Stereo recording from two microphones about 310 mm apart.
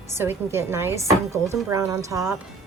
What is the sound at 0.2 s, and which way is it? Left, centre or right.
Speech, centre.